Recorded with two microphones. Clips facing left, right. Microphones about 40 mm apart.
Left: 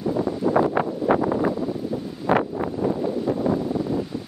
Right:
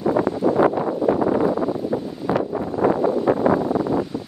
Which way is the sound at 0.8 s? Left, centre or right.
Left.